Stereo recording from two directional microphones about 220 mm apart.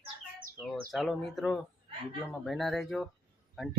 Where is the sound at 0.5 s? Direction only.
Centre (ahead or behind).